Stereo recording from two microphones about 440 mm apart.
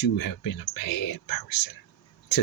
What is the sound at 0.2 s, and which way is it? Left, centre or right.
Speech, left.